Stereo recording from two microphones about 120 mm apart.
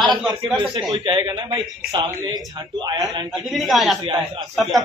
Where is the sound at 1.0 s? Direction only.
45° right (ahead or behind).